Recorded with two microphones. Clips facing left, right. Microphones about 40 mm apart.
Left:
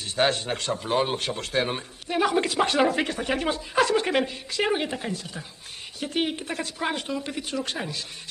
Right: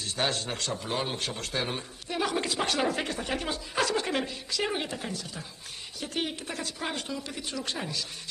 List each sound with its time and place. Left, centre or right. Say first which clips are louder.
0.0 s a man's voice: left 6 dB; left